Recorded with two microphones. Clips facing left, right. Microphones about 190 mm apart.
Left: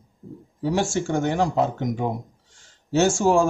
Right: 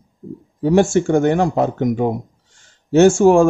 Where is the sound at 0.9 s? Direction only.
55° right (ahead or behind).